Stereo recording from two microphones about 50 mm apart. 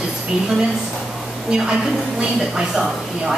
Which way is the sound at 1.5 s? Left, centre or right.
Centre.